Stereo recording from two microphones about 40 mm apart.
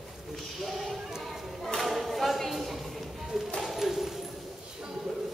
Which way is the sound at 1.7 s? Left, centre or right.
Centre.